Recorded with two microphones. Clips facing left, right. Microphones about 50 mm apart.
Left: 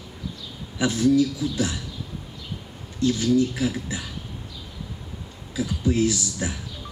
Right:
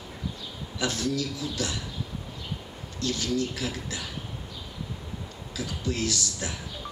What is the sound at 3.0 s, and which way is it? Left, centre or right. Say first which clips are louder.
A man's voice: left 8 dB; left.